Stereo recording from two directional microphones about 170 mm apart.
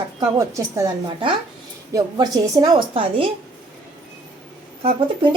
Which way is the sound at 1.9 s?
20° right (ahead or behind).